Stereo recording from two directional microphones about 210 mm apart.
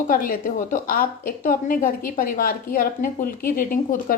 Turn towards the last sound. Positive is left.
turn(degrees=40)  # may be behind; listen again after turning